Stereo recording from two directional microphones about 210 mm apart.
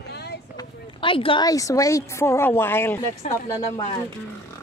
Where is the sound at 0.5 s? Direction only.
25° left (ahead or behind).